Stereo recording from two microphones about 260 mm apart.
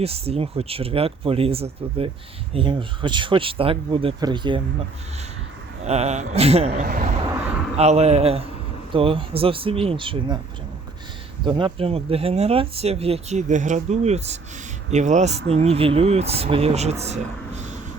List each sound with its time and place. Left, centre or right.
0.0 s speech: right
5.8 s speech: right
7.3 s a sound: centre
7.8 s speech: right
11.4 s speech: centre